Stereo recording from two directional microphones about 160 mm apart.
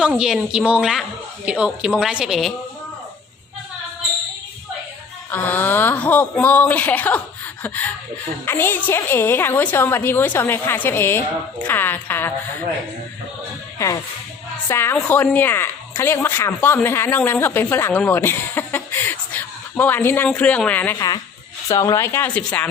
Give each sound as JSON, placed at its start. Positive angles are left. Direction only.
{"t": 0.0, "sound": "speech", "side_deg": -5}
{"t": 5.3, "sound": "speech", "side_deg": 10}
{"t": 8.4, "sound": "speech", "side_deg": 15}
{"t": 13.7, "sound": "speech", "side_deg": 20}
{"t": 21.7, "sound": "speech", "side_deg": 20}